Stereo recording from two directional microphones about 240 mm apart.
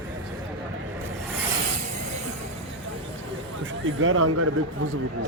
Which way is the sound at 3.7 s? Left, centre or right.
Right.